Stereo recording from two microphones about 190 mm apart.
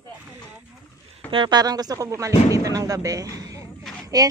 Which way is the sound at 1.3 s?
20° right (ahead or behind).